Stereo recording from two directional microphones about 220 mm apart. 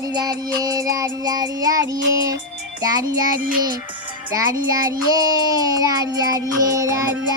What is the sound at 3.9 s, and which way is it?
Music, 20° right (ahead or behind).